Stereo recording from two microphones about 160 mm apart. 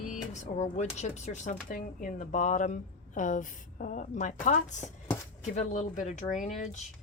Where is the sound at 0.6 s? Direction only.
45° left (ahead or behind).